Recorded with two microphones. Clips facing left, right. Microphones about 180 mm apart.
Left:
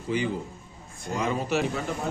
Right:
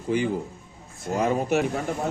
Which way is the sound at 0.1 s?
50° right (ahead or behind).